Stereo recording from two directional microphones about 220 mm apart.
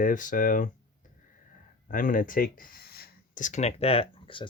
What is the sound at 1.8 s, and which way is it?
Speech, 35° left (ahead or behind).